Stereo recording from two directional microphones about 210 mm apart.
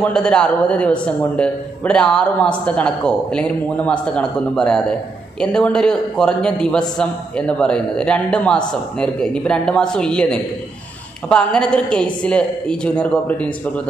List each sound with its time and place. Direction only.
0.0 s a man's voice: 5° left (ahead or behind)